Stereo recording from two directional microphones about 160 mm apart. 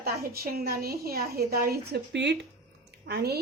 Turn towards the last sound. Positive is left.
turn(degrees=-90)